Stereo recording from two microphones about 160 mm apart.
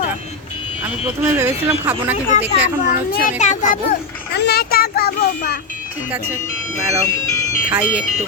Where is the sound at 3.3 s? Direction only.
50° left (ahead or behind).